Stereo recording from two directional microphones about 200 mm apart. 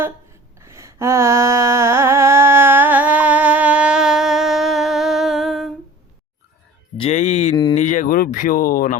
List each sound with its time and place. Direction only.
0.6 s a sound: 15° right (ahead or behind)
6.9 s music: 30° left (ahead or behind)
7.8 s speech: 40° left (ahead or behind)